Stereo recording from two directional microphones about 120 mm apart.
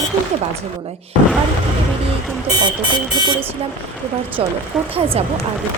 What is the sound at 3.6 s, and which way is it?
A woman's voice, 55° right (ahead or behind).